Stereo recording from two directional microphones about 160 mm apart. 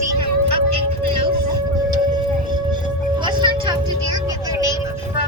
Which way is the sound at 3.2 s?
30° right (ahead or behind).